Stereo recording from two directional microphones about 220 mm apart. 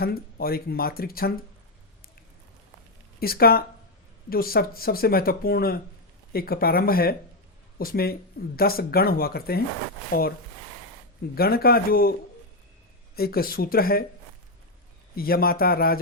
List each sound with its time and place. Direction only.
0.0 s speech: 45° left (ahead or behind)
3.2 s speech: 45° left (ahead or behind)
11.3 s speech: 45° left (ahead or behind)
13.1 s speech: 45° left (ahead or behind)
15.1 s speech: 45° left (ahead or behind)